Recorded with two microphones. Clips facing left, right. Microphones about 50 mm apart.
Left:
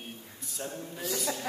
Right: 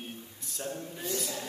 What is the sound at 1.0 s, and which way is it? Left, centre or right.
Speech, left.